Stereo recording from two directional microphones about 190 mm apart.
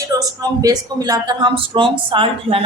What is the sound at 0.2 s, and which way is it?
A woman's voice, 20° right (ahead or behind).